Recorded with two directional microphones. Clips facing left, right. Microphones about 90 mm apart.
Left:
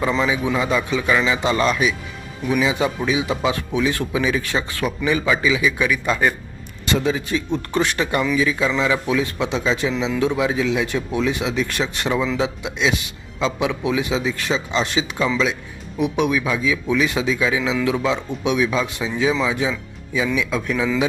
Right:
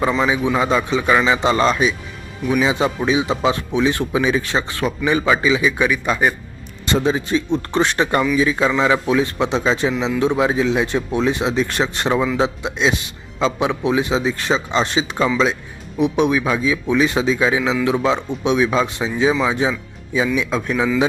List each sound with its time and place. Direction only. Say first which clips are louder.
0.5 s speech: right 3 dB; 30° right (ahead or behind)
6.8 s speech: right 2 dB; 30° right (ahead or behind)